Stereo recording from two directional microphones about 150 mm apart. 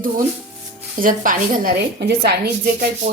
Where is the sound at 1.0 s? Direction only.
65° right (ahead or behind).